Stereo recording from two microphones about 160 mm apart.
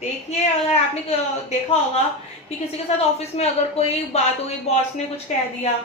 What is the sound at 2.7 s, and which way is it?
A woman's voice, 40° left (ahead or behind).